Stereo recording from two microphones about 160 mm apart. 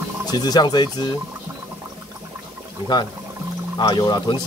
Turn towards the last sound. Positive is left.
turn(degrees=30)  # may be behind; listen again after turning